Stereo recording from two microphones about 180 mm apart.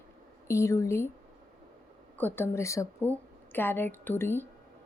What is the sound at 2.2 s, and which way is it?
A woman's voice, 10° left (ahead or behind).